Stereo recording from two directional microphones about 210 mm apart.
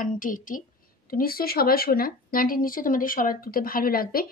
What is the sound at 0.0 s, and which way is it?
Speech, 40° left (ahead or behind).